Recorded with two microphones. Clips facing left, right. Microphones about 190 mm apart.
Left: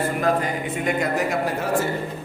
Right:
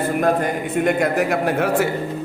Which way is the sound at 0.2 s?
55° right (ahead or behind).